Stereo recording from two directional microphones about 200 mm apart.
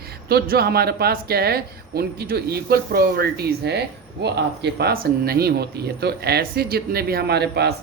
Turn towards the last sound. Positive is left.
turn(degrees=-55)  # may be behind; listen again after turning